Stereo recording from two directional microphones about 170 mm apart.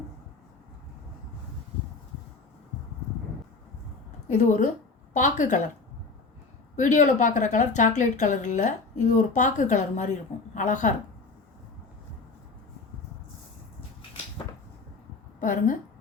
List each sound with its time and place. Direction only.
4.3 s a woman's voice: 45° left (ahead or behind)
6.7 s a woman's voice: 45° left (ahead or behind)
15.4 s a woman's voice: 50° left (ahead or behind)